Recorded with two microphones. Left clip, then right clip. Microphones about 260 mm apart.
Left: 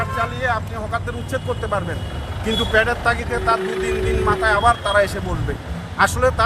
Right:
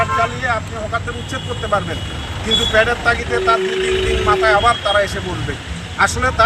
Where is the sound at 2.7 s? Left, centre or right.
Left.